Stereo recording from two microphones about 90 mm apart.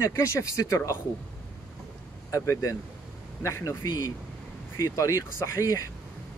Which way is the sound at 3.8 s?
50° left (ahead or behind).